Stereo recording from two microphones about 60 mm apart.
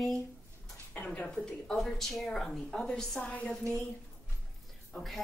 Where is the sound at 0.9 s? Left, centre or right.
Left.